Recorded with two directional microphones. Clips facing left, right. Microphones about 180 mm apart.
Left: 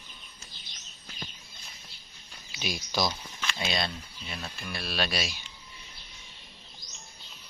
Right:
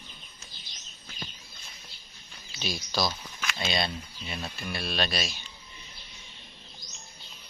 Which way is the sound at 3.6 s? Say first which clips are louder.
Right 2 dB; centre (ahead or behind).